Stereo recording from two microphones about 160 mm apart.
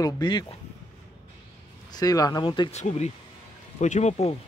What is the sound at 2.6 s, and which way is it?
Speech, 45° left (ahead or behind).